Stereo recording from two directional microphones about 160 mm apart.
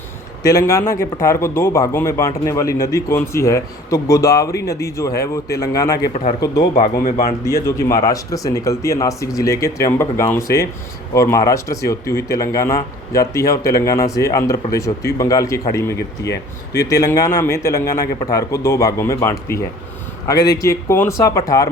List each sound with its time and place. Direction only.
0.4 s speech: 20° left (ahead or behind)
6.7 s speech: 65° left (ahead or behind)
7.8 s speech: 20° left (ahead or behind)
16.0 s speech: 90° left
16.8 s speech: 20° left (ahead or behind)